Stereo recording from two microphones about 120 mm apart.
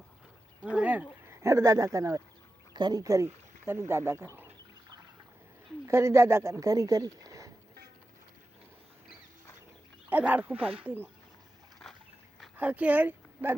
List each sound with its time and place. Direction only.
0.6 s a sound: 10° right (ahead or behind)
1.3 s speech: 25° right (ahead or behind)
5.8 s speech: 25° right (ahead or behind)
10.1 s speech: 15° right (ahead or behind)
12.5 s speech: 10° right (ahead or behind)